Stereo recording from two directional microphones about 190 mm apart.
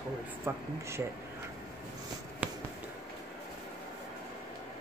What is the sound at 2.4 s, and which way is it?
Music, 10° right (ahead or behind).